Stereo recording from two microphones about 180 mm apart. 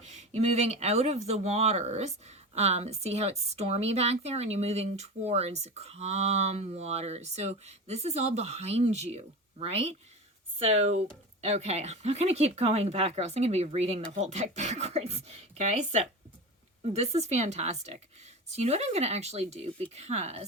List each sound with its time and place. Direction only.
0.0 s speech: 40° right (ahead or behind)